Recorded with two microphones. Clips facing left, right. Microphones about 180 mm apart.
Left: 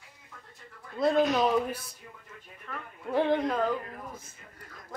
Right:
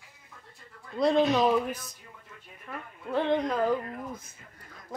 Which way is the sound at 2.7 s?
15° right (ahead or behind).